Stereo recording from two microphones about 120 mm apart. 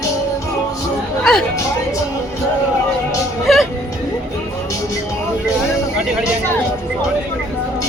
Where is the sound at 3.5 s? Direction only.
Centre (ahead or behind).